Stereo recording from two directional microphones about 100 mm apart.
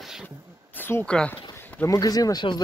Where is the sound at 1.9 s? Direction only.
40° left (ahead or behind).